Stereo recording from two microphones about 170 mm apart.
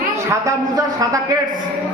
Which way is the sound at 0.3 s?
20° right (ahead or behind).